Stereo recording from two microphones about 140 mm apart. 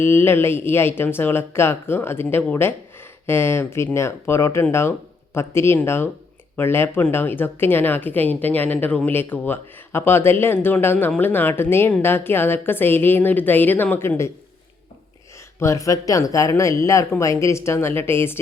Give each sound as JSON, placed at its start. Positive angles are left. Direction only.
{"t": 0.0, "sound": "speech", "side_deg": 15}
{"t": 15.6, "sound": "speech", "side_deg": 20}